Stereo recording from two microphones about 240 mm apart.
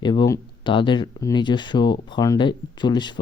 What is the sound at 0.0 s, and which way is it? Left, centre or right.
Speech, centre.